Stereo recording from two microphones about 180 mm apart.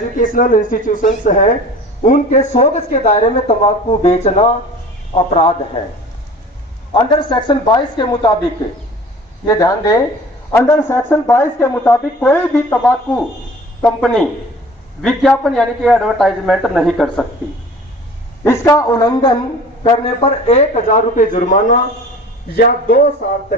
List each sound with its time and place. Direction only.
0.2 s a man's voice: 50° left (ahead or behind); by 5.8 s 30° left (ahead or behind)
6.9 s speech: 25° left (ahead or behind)
9.5 s a man's voice: 20° left (ahead or behind); by 17.2 s centre (ahead or behind)
18.4 s speech: 15° left (ahead or behind)
19.8 s a man's voice: 35° left (ahead or behind)
22.5 s a man's voice: 60° left (ahead or behind)